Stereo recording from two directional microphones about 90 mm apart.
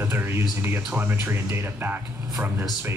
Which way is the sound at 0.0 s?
25° right (ahead or behind).